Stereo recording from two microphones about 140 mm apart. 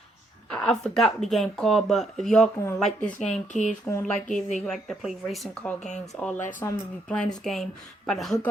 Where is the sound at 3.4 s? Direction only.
60° left (ahead or behind).